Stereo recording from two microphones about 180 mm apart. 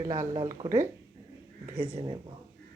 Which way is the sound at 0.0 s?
25° right (ahead or behind).